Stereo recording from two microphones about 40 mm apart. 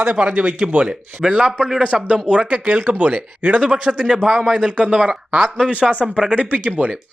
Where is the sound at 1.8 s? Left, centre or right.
Right.